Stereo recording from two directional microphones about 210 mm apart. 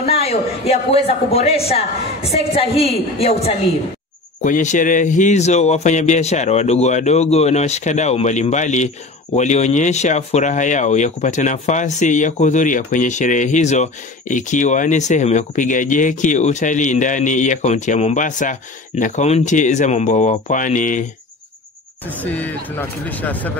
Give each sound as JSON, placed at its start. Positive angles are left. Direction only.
{"t": 0.0, "sound": "speech", "side_deg": 30}
{"t": 22.2, "sound": "speech", "side_deg": 5}